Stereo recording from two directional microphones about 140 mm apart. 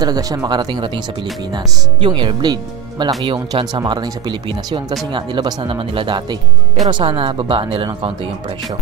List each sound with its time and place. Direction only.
0.0 s speech: 25° right (ahead or behind)